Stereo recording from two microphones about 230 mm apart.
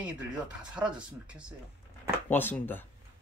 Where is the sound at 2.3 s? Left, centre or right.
Centre.